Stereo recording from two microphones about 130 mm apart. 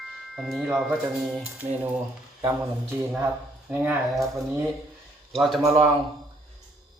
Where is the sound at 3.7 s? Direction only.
10° right (ahead or behind).